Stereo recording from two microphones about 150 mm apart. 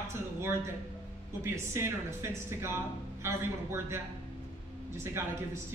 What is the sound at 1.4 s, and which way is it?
Speech, 20° right (ahead or behind).